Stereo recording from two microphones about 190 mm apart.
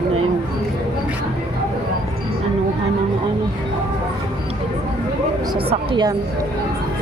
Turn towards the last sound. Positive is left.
turn(degrees=-25)  # may be behind; listen again after turning